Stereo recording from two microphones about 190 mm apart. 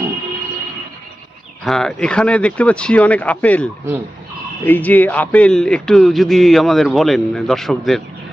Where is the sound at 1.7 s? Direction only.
5° left (ahead or behind).